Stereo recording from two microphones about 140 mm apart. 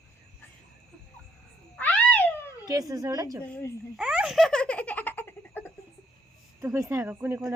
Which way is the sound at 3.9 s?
5° right (ahead or behind).